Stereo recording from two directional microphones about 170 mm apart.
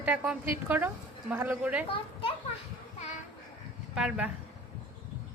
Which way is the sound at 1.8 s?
35° left (ahead or behind).